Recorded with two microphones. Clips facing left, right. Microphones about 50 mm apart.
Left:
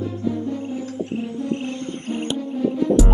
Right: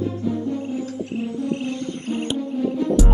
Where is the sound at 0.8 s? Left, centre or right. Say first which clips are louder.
Even; left.